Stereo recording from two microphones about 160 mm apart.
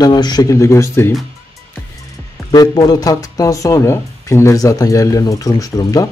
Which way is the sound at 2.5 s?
25° left (ahead or behind).